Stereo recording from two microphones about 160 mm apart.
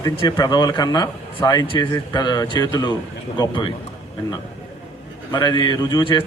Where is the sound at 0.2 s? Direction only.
25° left (ahead or behind).